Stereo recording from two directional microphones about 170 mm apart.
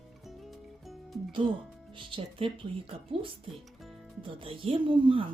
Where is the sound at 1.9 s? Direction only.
30° right (ahead or behind).